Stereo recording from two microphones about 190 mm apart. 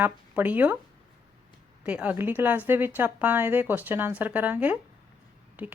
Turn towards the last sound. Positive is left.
turn(degrees=-5)  # may be behind; listen again after turning